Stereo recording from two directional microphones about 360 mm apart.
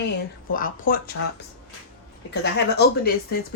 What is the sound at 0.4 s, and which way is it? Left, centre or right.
Speech, left.